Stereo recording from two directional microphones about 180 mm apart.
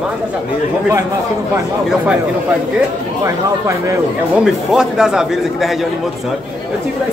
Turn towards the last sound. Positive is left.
turn(degrees=-5)  # may be behind; listen again after turning